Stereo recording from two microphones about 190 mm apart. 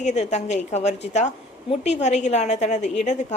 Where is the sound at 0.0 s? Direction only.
35° left (ahead or behind).